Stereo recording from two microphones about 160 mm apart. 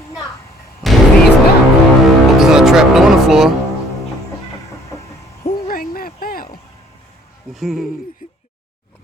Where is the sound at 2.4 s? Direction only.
5° right (ahead or behind).